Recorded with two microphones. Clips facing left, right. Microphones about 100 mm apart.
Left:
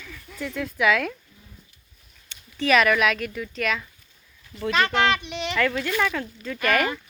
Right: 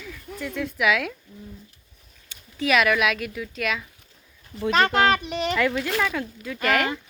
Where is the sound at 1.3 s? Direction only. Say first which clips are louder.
Right 12 dB; 55° right (ahead or behind).